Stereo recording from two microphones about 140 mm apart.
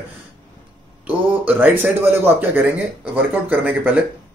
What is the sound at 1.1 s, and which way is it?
Speech, 10° right (ahead or behind).